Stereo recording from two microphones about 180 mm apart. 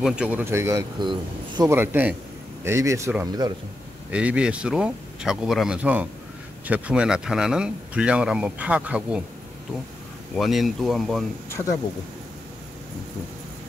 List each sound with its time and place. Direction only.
0.0 s speech: 5° right (ahead or behind); by 1.7 s 25° right (ahead or behind)
1.7 s speech: 10° right (ahead or behind)
10.3 s speech: centre (ahead or behind)